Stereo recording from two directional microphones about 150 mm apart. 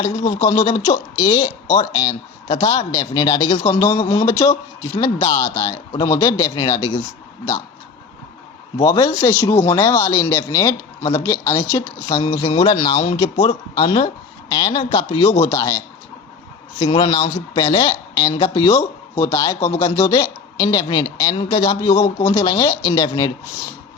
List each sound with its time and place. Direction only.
0.0 s speech: 30° left (ahead or behind)
8.8 s speech: 25° left (ahead or behind)
16.7 s speech: 35° left (ahead or behind)